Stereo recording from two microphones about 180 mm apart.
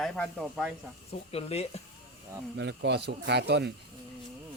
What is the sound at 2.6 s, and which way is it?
Speech, 75° right (ahead or behind).